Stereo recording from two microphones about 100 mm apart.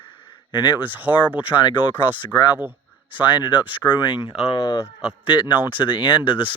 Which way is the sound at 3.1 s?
50° left (ahead or behind).